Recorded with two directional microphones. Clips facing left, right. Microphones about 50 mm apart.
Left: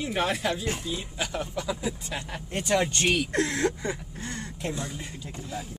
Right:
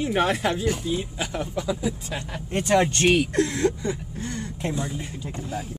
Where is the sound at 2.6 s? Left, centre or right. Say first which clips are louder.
Right 5 dB; right.